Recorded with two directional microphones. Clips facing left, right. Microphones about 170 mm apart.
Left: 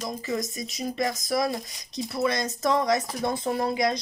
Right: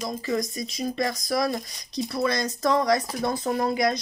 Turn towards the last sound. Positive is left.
turn(degrees=25)  # may be behind; listen again after turning